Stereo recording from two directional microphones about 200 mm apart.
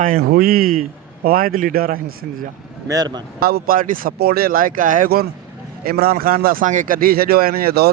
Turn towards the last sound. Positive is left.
turn(degrees=-50)  # may be behind; listen again after turning